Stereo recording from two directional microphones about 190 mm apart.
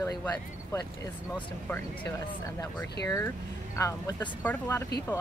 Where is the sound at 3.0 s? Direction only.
15° left (ahead or behind).